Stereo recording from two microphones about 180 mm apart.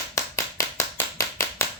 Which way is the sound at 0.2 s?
15° left (ahead or behind).